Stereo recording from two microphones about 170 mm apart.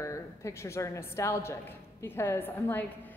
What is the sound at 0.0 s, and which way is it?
A woman's voice, 15° left (ahead or behind).